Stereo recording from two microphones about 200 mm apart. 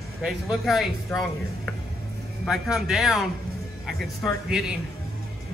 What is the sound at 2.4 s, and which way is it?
Speech, centre (ahead or behind).